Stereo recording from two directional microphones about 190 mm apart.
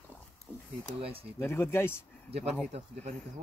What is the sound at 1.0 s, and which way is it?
Speech, 30° right (ahead or behind).